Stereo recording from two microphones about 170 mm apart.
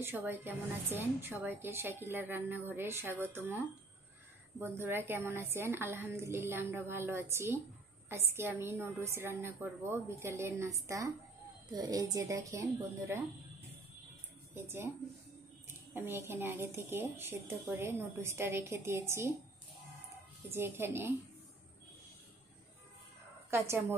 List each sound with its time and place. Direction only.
0.0 s a woman's voice: 10° right (ahead or behind)
14.5 s speech: 15° right (ahead or behind)
15.9 s a woman's voice: 15° right (ahead or behind)
20.5 s a woman's voice: 15° right (ahead or behind)
23.5 s a woman's voice: 15° right (ahead or behind)